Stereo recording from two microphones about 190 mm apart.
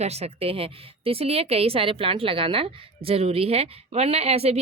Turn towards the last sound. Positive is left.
turn(degrees=-35)  # may be behind; listen again after turning